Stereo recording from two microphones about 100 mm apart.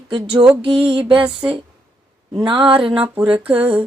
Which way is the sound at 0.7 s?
10° right (ahead or behind).